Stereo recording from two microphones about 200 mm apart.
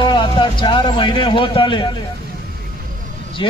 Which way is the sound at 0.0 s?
25° left (ahead or behind).